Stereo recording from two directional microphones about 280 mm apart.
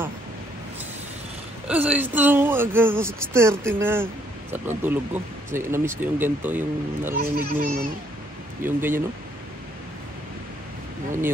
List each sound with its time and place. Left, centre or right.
1.7 s speech: centre
7.2 s speech: right
8.6 s speech: centre